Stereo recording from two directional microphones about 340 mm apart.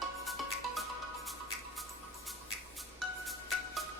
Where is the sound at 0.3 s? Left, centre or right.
Centre.